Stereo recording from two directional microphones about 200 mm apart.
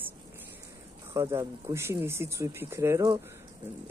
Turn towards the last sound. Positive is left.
turn(degrees=-15)  # may be behind; listen again after turning